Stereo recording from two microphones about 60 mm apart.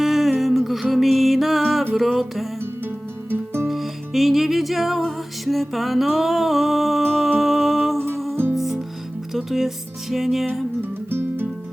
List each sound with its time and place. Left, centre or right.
0.0 s music: centre
2.6 s music: right
3.7 s music: centre
10.8 s music: right